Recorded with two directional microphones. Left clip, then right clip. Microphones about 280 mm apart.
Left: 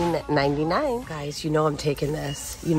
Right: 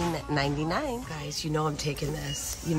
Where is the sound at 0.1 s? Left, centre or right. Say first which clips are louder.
Left 7 dB; centre.